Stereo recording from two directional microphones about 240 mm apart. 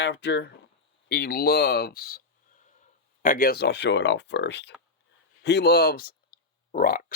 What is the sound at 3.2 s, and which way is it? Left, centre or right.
Speech, left.